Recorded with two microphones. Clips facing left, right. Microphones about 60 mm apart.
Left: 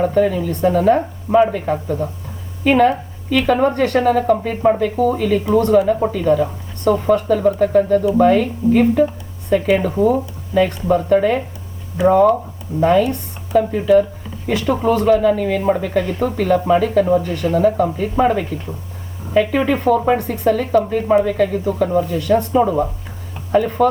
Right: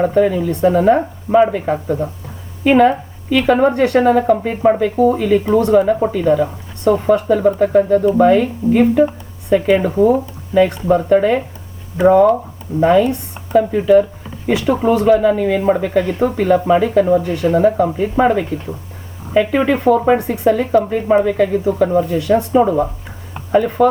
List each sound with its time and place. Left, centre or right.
0.0 s speech: centre
22.6 s speech: centre